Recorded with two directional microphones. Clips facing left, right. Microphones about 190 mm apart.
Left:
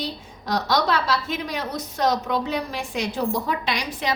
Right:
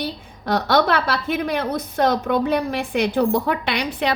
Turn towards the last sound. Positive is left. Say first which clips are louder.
# right 4 dB
turn(degrees=-60)  # may be behind; listen again after turning